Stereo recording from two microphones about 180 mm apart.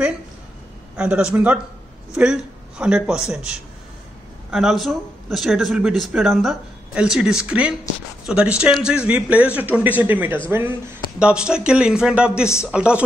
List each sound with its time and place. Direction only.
0.9 s a man's voice: 5° right (ahead or behind)